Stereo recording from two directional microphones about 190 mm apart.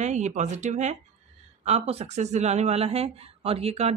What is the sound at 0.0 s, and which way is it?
Speech, 40° right (ahead or behind).